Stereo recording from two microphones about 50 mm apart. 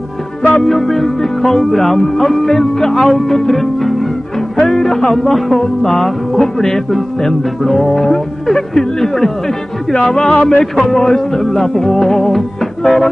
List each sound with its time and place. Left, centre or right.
0.4 s music: centre
0.7 s music: centre
9.9 s speech: centre
10.6 s music: centre